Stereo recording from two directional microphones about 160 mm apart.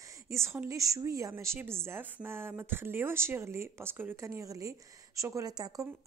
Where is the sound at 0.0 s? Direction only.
20° right (ahead or behind).